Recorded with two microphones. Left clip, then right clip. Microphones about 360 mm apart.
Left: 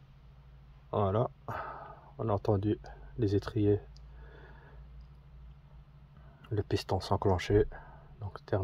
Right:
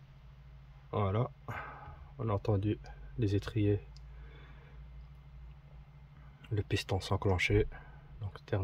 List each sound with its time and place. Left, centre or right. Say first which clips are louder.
0.8 s speech: left 5 dB; centre
6.5 s speech: left 3 dB; centre